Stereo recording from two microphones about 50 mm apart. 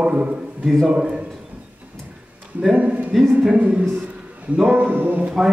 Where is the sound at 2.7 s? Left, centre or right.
Right.